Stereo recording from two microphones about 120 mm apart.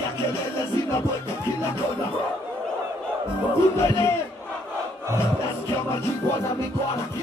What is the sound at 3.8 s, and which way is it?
Speech, 25° left (ahead or behind).